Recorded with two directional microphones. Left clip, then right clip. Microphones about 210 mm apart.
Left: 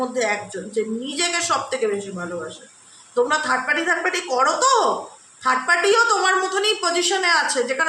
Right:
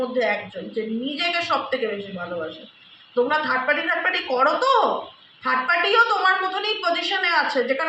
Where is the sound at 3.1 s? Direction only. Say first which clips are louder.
Left 1 dB; 55° left (ahead or behind).